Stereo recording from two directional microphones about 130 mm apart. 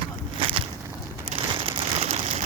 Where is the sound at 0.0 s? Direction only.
40° right (ahead or behind).